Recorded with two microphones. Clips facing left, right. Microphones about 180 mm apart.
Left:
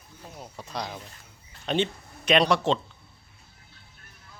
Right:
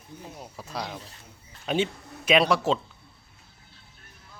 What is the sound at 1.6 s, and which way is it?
Speech, 5° right (ahead or behind).